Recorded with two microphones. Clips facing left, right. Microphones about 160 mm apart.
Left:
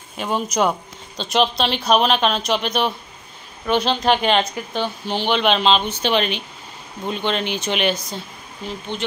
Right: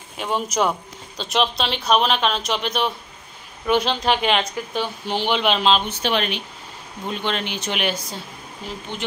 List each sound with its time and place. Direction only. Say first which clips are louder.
0.2 s speech: left 2 dB; centre (ahead or behind)
5.0 s speech: left 2 dB; 10° right (ahead or behind)